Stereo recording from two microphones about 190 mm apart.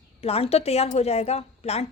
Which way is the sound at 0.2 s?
30° left (ahead or behind).